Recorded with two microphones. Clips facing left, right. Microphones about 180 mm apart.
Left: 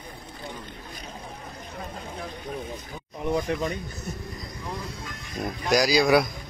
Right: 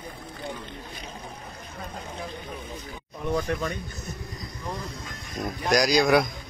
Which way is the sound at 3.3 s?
15° left (ahead or behind).